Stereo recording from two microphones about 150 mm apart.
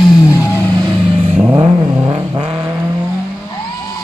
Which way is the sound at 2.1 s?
30° right (ahead or behind).